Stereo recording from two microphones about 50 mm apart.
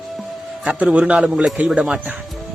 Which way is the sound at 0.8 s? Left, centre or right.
Right.